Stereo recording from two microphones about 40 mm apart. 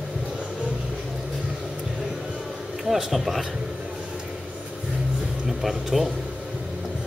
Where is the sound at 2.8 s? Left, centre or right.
Centre.